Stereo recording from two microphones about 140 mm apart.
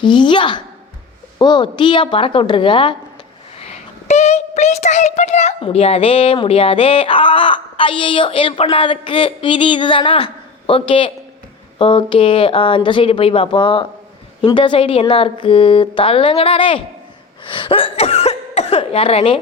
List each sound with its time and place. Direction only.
0.0 s speech: 35° left (ahead or behind)
3.6 s speech: 55° left (ahead or behind)